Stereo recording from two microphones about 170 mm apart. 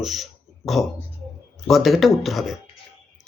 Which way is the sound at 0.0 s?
Centre (ahead or behind).